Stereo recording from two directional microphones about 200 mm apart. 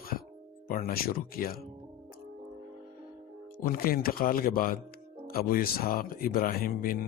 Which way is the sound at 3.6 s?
45° left (ahead or behind).